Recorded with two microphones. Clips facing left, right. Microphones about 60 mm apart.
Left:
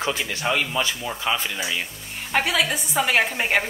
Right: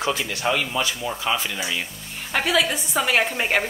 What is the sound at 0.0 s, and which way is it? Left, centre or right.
Speech, left.